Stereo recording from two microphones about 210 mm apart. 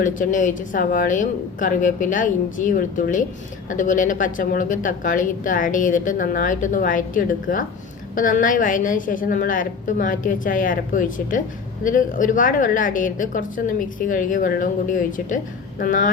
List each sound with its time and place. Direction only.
0.0 s a woman's voice: 40° left (ahead or behind)